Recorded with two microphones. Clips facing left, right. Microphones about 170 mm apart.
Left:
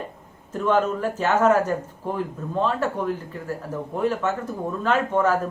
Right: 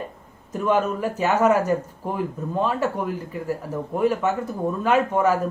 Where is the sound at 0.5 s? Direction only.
10° right (ahead or behind).